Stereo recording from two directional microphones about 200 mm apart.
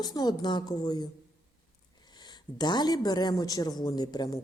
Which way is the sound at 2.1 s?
20° left (ahead or behind).